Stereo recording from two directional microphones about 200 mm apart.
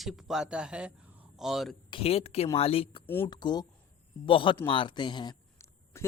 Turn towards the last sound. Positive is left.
turn(degrees=15)  # may be behind; listen again after turning